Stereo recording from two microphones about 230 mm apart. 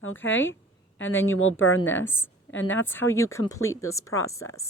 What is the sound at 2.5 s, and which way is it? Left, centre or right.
Speech, left.